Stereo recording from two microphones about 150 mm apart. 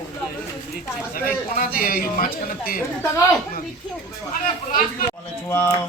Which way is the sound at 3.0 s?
15° left (ahead or behind).